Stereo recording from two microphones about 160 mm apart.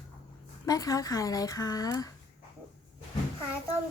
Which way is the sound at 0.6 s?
20° left (ahead or behind).